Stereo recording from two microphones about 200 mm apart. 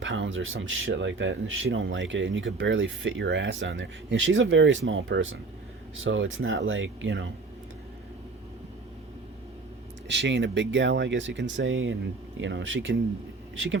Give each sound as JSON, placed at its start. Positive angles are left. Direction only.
{"t": 0.0, "sound": "speech", "side_deg": -70}
{"t": 10.1, "sound": "speech", "side_deg": -65}